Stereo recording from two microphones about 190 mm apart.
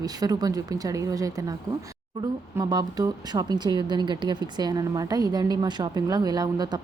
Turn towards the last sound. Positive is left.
turn(degrees=-20)  # may be behind; listen again after turning